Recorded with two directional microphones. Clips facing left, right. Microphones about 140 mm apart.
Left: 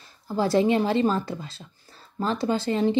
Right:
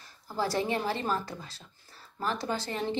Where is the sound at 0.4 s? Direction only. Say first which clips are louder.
Left 8 dB; 20° left (ahead or behind).